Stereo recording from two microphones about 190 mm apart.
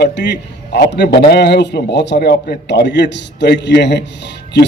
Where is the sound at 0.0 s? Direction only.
65° left (ahead or behind).